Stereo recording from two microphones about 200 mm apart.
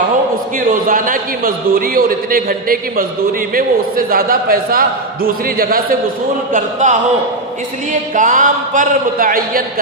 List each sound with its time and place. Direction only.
0.7 s a man's voice: 45° right (ahead or behind)
8.1 s a man's voice: 40° right (ahead or behind)